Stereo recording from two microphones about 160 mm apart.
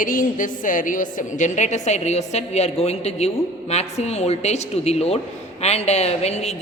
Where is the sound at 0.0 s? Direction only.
60° left (ahead or behind).